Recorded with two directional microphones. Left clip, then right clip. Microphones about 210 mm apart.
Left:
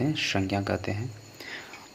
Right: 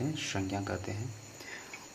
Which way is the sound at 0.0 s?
30° left (ahead or behind).